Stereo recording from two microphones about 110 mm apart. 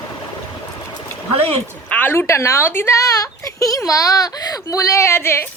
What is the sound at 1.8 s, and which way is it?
Speech, 15° left (ahead or behind).